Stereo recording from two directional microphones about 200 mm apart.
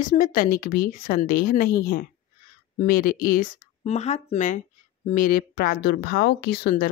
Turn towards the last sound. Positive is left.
turn(degrees=50)  # may be behind; listen again after turning